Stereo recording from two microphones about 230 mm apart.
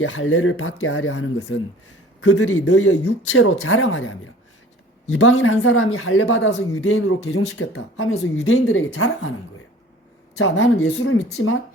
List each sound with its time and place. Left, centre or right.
0.0 s speech: left
2.2 s speech: left
10.3 s speech: left